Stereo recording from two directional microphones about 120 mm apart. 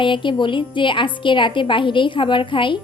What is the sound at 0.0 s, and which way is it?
A woman's voice, 40° left (ahead or behind).